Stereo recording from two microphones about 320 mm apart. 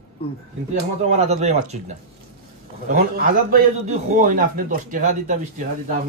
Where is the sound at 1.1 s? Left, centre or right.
Centre.